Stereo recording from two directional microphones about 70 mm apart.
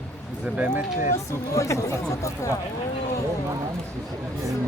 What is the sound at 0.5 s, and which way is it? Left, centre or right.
Speech, right.